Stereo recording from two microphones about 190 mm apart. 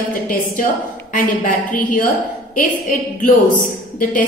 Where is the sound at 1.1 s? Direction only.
45° left (ahead or behind).